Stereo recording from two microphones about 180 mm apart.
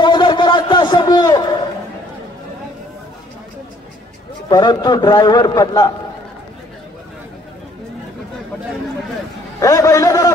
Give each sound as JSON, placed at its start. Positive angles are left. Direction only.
{"t": 0.0, "sound": "a sound", "side_deg": 25}
{"t": 4.5, "sound": "a man's voice", "side_deg": 25}
{"t": 9.6, "sound": "a man's voice", "side_deg": 15}